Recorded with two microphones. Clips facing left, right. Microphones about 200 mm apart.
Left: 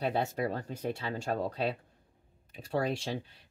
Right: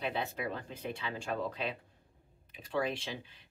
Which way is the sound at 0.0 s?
45° left (ahead or behind).